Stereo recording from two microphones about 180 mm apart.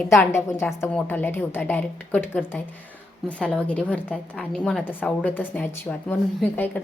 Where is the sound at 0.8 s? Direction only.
10° left (ahead or behind).